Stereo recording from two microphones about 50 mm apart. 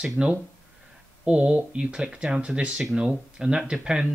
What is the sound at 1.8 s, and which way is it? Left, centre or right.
Speech, centre.